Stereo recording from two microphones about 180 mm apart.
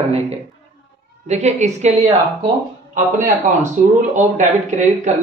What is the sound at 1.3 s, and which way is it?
Speech, 40° right (ahead or behind).